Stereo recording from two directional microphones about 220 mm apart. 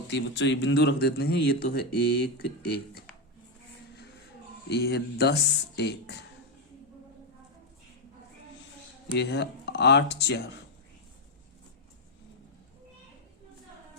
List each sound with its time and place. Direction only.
0.1 s speech: 55° left (ahead or behind)
4.7 s speech: 50° left (ahead or behind)
9.1 s speech: 50° left (ahead or behind)